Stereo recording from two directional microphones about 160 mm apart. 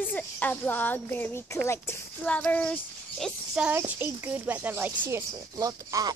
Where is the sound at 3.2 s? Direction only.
5° right (ahead or behind).